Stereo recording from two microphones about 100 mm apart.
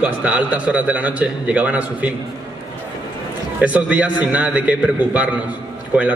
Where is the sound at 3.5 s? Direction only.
15° right (ahead or behind).